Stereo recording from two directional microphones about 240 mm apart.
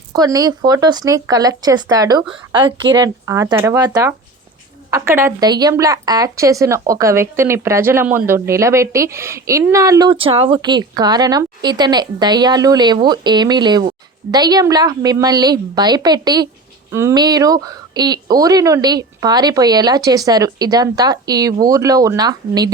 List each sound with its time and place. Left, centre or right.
0.1 s speech: centre